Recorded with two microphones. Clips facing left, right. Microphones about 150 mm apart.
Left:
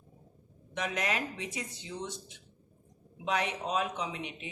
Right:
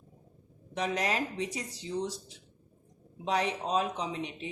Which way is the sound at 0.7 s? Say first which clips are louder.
Right 3 dB; 35° right (ahead or behind).